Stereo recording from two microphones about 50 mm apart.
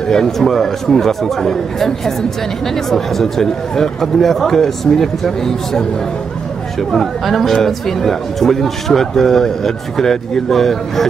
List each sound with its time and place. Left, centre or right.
0.1 s speech: centre